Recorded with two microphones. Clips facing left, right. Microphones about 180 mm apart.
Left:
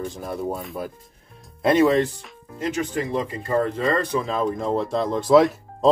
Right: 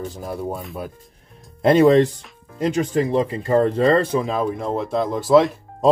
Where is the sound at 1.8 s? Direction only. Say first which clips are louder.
Right 6 dB; 35° right (ahead or behind).